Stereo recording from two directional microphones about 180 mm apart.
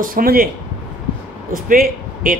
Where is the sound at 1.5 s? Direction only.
50° right (ahead or behind).